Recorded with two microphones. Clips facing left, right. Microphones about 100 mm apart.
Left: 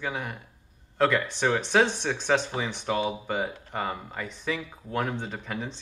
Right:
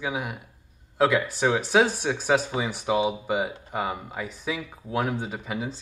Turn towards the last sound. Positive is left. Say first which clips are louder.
# right 3 dB
turn(degrees=-5)  # may be behind; listen again after turning